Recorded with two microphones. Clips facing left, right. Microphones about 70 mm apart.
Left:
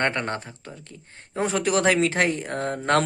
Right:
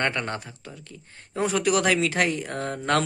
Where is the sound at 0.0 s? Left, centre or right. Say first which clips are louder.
Left 2 dB; left.